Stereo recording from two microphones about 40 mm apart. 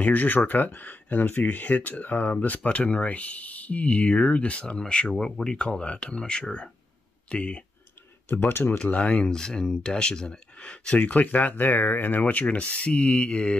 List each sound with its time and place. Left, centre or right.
0.0 s speech: left
8.3 s speech: left
8.7 s speech: left
9.3 s speech: centre
11.0 s speech: left
12.4 s speech: left